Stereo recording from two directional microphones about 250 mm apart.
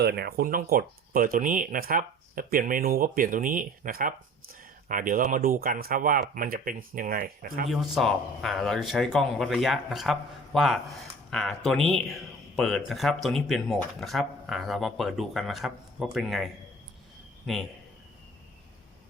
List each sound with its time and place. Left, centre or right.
0.0 s speech: right
7.7 s a man's voice: centre